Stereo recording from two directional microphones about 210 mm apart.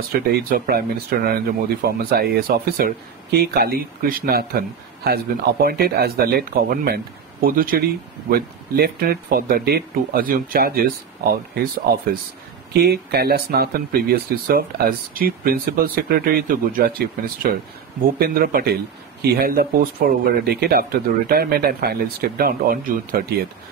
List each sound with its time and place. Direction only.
0.1 s speech: 45° right (ahead or behind)
12.7 s speech: 50° right (ahead or behind)